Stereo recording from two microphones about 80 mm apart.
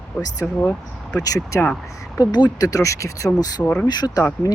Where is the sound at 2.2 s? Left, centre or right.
Left.